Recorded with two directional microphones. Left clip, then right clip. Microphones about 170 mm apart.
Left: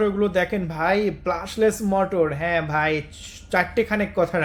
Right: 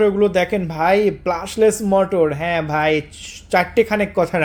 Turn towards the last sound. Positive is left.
turn(degrees=-35)  # may be behind; listen again after turning